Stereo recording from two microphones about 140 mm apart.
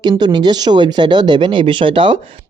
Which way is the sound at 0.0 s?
30° right (ahead or behind).